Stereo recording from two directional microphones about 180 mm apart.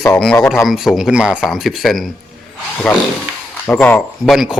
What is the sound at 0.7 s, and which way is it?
Speech, centre (ahead or behind).